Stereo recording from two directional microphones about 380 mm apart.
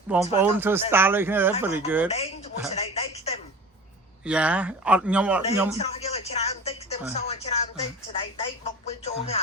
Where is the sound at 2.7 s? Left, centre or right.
Centre.